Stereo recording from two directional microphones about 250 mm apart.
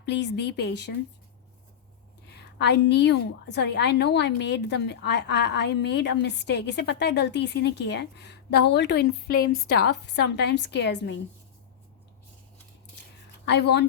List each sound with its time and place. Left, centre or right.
0.0 s a woman's voice: left
2.6 s a woman's voice: left
13.4 s speech: left